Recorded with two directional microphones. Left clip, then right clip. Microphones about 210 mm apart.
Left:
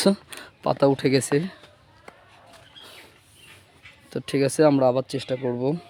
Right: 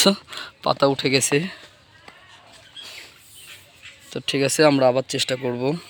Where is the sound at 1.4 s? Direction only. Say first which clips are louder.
Right 4 dB; centre (ahead or behind).